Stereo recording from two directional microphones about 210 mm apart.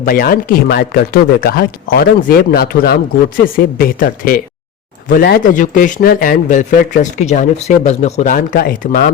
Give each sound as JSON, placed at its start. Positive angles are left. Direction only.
{"t": 0.0, "sound": "speech", "side_deg": 45}